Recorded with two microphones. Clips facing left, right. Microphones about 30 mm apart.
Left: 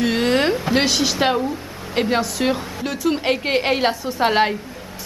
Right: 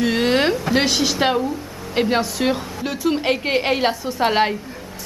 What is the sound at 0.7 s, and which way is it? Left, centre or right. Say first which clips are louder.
A woman's voice: even; centre.